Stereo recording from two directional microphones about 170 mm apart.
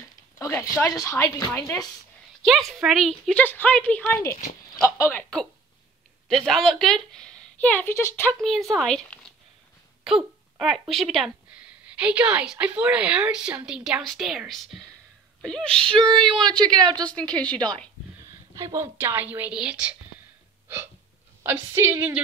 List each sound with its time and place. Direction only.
0.4 s a sound: 15° left (ahead or behind)
0.7 s a woman's voice: 15° left (ahead or behind)
2.4 s a woman's voice: centre (ahead or behind); by 5.2 s 15° left (ahead or behind)
6.2 s a woman's voice: 5° left (ahead or behind)
15.9 s a woman's voice: 30° right (ahead or behind)
17.0 s a woman's voice: 5° left (ahead or behind)
18.5 s a woman's voice: 20° right (ahead or behind)
21.4 s a woman's voice: 15° right (ahead or behind)